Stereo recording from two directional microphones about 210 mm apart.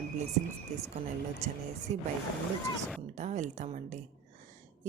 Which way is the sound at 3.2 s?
35° right (ahead or behind).